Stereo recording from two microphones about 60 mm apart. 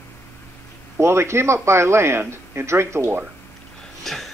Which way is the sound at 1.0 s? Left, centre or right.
Right.